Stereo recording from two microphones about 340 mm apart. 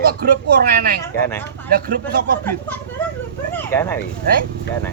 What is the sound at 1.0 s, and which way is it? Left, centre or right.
Speech, centre.